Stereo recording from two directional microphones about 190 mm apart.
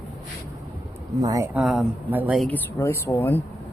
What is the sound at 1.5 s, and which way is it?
Speech, centre (ahead or behind).